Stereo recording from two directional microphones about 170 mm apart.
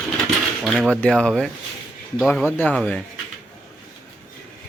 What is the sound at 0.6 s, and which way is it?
Speech, 5° left (ahead or behind).